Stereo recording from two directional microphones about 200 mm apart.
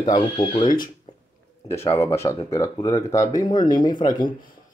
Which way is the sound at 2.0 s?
15° left (ahead or behind).